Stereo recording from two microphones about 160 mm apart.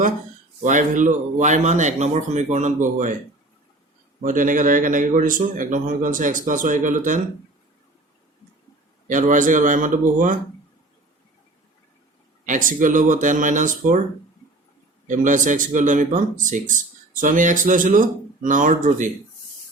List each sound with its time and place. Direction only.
0.6 s speech: 55° right (ahead or behind)
4.2 s a man's voice: 55° right (ahead or behind)
9.0 s a man's voice: 55° right (ahead or behind)
12.5 s speech: 55° right (ahead or behind)
15.0 s a man's voice: 55° right (ahead or behind)